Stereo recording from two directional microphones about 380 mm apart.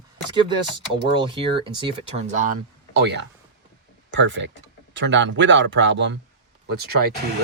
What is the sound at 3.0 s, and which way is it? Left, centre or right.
Speech, right.